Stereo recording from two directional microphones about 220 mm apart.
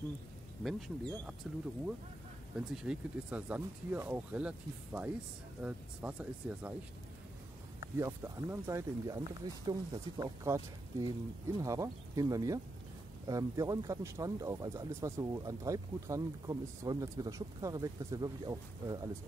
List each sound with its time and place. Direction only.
0.7 s speech: centre (ahead or behind)
2.7 s speech: 5° right (ahead or behind)
8.0 s speech: 10° right (ahead or behind)